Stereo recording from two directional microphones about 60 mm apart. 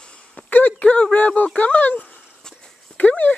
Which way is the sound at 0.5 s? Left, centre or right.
Left.